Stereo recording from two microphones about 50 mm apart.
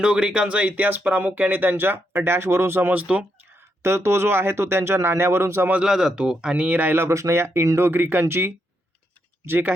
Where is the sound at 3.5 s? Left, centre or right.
Right.